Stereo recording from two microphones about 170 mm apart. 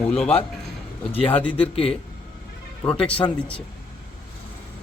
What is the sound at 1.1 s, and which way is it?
Speech, 35° left (ahead or behind).